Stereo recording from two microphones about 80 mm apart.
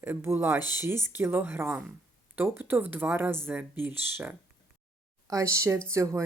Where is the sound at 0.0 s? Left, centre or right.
Right.